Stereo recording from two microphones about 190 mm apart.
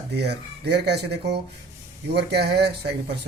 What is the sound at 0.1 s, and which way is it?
Speech, 60° right (ahead or behind).